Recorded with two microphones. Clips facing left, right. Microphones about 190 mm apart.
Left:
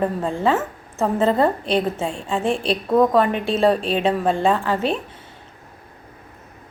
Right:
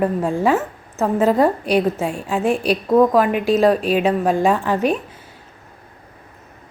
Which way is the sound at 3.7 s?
30° left (ahead or behind).